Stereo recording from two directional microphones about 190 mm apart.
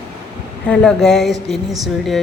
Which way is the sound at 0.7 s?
5° left (ahead or behind).